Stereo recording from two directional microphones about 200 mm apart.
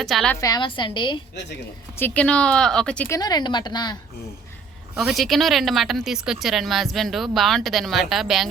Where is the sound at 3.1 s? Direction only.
20° left (ahead or behind).